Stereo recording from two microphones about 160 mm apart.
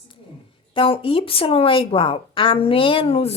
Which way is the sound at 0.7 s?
35° left (ahead or behind).